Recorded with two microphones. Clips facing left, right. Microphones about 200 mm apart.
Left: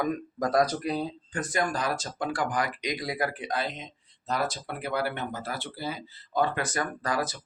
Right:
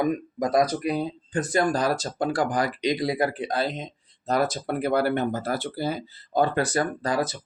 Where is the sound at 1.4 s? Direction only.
30° right (ahead or behind).